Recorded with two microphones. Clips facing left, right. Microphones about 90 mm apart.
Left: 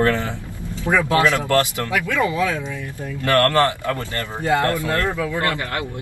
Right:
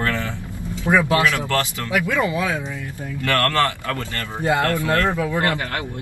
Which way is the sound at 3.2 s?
20° left (ahead or behind).